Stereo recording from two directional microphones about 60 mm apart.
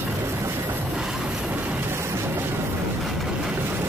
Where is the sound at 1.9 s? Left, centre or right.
Right.